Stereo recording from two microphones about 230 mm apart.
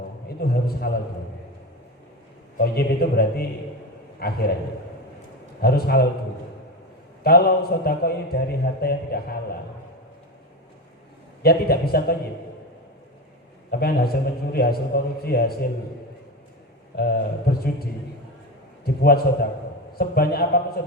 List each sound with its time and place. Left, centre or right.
0.3 s a sound: left
2.6 s a man's voice: left
5.6 s a man's voice: left
7.3 s a man's voice: left
11.4 s a man's voice: left
13.7 s a man's voice: left
16.9 s a man's voice: left
19.0 s a man's voice: left